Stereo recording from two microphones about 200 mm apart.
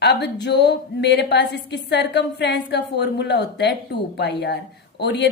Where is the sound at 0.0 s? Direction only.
60° left (ahead or behind).